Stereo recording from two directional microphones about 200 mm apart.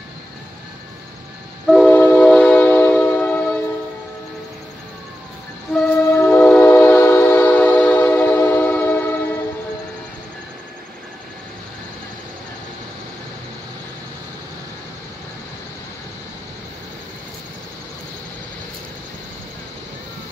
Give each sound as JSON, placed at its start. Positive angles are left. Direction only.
{"t": 1.7, "sound": "music", "side_deg": 5}
{"t": 5.7, "sound": "train", "side_deg": 5}